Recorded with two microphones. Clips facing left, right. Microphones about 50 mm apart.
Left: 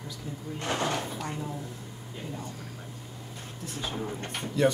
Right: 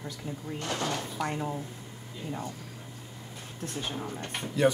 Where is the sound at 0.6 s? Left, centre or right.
Left.